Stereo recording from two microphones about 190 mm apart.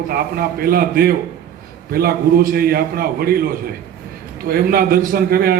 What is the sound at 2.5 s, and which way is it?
Speech, 55° right (ahead or behind).